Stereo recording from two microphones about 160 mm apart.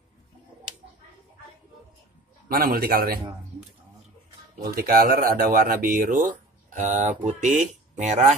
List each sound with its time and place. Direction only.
2.4 s a man's voice: 65° right (ahead or behind)
4.6 s speech: 65° right (ahead or behind)
6.7 s speech: 50° right (ahead or behind)